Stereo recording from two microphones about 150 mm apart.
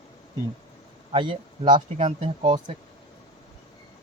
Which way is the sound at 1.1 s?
35° right (ahead or behind).